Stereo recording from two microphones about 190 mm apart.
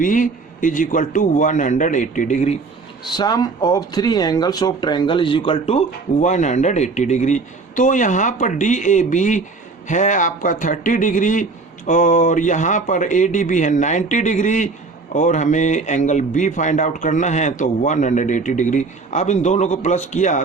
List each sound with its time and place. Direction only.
0.0 s speech: 45° left (ahead or behind)
3.1 s speech: 20° left (ahead or behind); by 20.4 s 40° left (ahead or behind)